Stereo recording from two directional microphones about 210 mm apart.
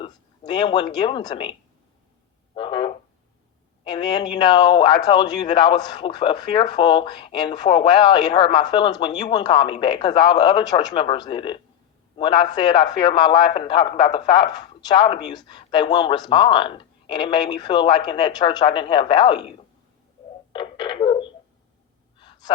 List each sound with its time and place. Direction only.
0.0 s speech: 20° left (ahead or behind)
2.6 s speech: 25° left (ahead or behind)
20.5 s a sound: 20° left (ahead or behind)
22.2 s honk: 20° left (ahead or behind)